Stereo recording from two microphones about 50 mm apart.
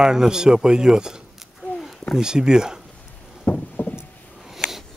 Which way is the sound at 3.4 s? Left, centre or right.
Left.